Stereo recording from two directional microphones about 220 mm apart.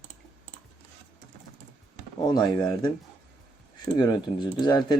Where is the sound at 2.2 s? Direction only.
20° left (ahead or behind).